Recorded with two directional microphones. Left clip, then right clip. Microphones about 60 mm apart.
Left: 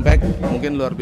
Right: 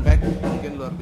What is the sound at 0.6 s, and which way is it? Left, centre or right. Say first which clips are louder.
Speech: left 9 dB; left.